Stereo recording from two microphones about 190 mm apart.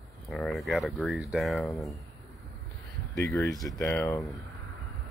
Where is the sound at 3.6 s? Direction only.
Centre (ahead or behind).